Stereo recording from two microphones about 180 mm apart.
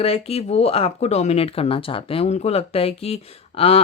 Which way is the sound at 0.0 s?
35° left (ahead or behind).